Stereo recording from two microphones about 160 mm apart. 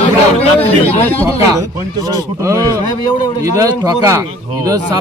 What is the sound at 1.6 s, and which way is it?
Speech, 20° right (ahead or behind).